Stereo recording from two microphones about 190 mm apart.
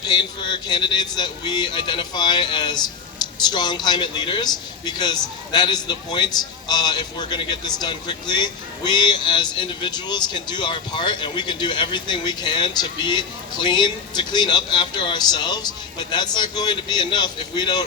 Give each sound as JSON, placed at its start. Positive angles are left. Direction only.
{"t": 0.0, "sound": "speech", "side_deg": 25}